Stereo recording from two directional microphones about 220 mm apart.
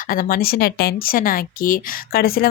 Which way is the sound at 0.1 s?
40° left (ahead or behind).